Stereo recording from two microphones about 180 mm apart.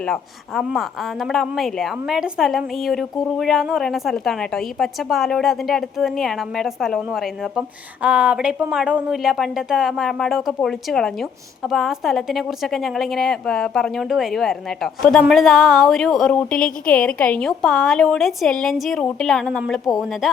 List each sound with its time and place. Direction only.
0.0 s a woman's voice: centre (ahead or behind)